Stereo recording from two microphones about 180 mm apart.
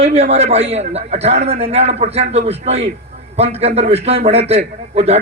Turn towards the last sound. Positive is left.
turn(degrees=-35)  # may be behind; listen again after turning